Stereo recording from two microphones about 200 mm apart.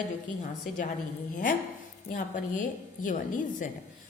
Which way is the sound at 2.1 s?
40° left (ahead or behind).